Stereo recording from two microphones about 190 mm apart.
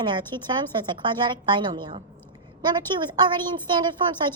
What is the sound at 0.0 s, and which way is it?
A woman's voice, 25° right (ahead or behind).